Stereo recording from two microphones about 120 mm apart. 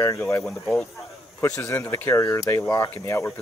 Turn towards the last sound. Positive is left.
turn(degrees=20)  # may be behind; listen again after turning